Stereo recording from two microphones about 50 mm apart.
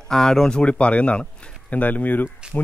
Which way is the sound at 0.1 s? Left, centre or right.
Centre.